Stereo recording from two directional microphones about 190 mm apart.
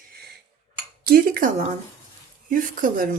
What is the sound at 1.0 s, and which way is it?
Speech, 50° right (ahead or behind).